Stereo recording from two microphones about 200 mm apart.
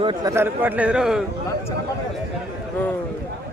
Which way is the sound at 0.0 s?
25° right (ahead or behind).